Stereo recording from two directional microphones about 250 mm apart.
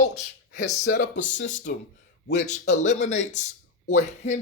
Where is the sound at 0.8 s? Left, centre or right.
Left.